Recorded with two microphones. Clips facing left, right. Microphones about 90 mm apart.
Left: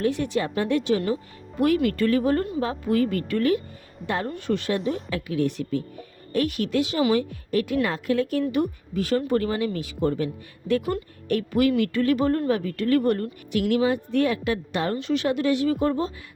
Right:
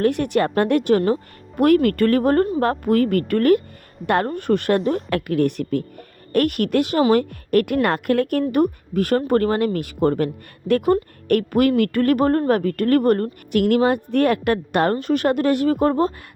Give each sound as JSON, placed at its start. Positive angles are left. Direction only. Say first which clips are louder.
{"t": 0.0, "sound": "a woman's voice", "louder": "right 6 dB", "side_deg": -60}
{"t": 4.9, "sound": "speech", "louder": "right 5 dB", "side_deg": -45}
{"t": 5.1, "sound": "a woman's voice", "louder": "right 6 dB", "side_deg": -60}